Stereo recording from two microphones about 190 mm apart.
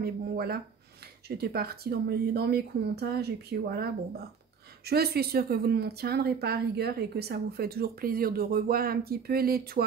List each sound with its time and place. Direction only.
0.0 s speech: 55° right (ahead or behind)